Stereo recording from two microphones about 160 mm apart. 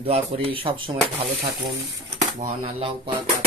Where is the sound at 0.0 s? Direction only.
35° right (ahead or behind).